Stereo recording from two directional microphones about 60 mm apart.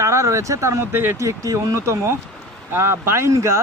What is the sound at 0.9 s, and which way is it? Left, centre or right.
Speech, right.